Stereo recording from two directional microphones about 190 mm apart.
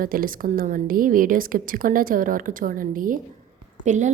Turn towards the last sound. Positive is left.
turn(degrees=-40)  # may be behind; listen again after turning